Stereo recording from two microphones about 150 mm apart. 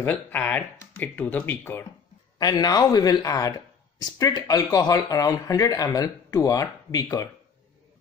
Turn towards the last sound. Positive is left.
turn(degrees=25)  # may be behind; listen again after turning